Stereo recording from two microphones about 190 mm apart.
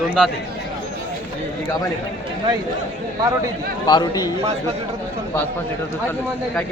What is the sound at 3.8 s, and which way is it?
Speech, 20° left (ahead or behind).